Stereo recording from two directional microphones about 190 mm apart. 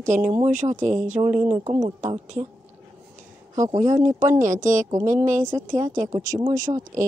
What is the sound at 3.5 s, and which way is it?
A woman's voice, 20° right (ahead or behind).